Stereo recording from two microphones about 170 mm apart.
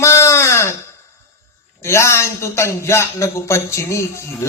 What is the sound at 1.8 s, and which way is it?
A man's voice, 15° left (ahead or behind).